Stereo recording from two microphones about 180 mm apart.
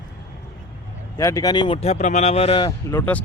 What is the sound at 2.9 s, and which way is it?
Speech, 10° left (ahead or behind).